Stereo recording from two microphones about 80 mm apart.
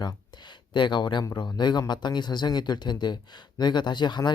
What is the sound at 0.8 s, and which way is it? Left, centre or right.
Speech, left.